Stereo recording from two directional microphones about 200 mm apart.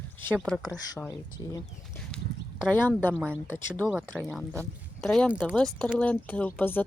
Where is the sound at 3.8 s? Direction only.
5° right (ahead or behind).